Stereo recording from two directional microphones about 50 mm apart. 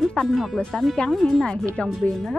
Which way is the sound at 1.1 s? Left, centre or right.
Centre.